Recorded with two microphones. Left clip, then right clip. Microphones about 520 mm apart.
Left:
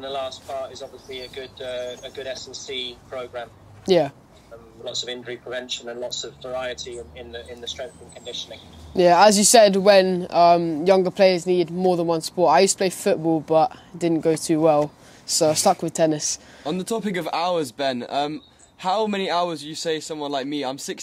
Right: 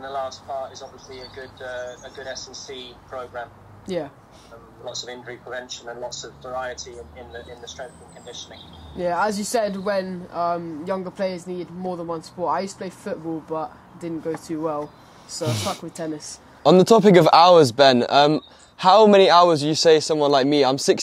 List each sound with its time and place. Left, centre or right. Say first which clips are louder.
0.0 s speech: even; left
2.4 s speech: left 5 dB; left
4.8 s speech: left 3 dB; left
8.9 s speech: left 9 dB; left
16.6 s speech: right 14 dB; right